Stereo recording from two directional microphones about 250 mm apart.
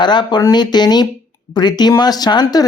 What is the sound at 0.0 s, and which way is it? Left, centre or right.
Speech, centre.